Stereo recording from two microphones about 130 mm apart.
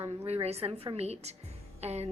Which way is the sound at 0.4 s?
55° right (ahead or behind).